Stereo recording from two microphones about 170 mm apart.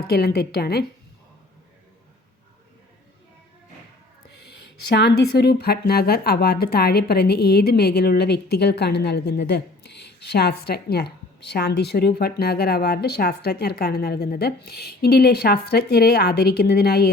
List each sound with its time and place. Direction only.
0.1 s a woman's voice: 65° left (ahead or behind)
4.9 s a woman's voice: 75° left (ahead or behind)